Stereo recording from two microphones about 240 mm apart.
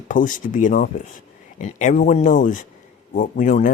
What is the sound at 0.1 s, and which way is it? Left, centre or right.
Speech, left.